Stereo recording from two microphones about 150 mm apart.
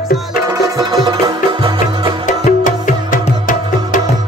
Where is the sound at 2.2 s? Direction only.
60° left (ahead or behind).